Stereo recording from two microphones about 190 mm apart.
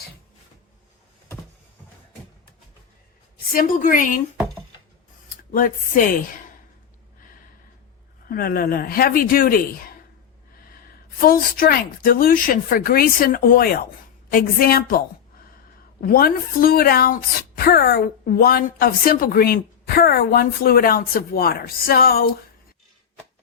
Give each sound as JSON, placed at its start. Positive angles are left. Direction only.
{"t": 3.5, "sound": "a woman's voice", "side_deg": 45}
{"t": 5.5, "sound": "a woman's voice", "side_deg": 50}
{"t": 7.2, "sound": "a sound", "side_deg": 45}
{"t": 8.3, "sound": "a woman's voice", "side_deg": 50}